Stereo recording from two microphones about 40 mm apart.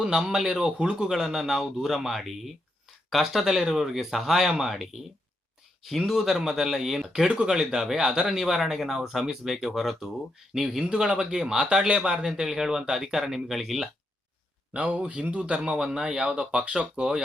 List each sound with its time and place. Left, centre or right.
0.0 s a man's voice: centre
6.1 s a man's voice: centre
14.7 s speech: right
15.6 s speech: centre